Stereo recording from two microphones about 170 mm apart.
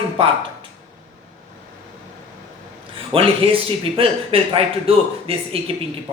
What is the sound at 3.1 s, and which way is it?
A man's voice, 35° right (ahead or behind).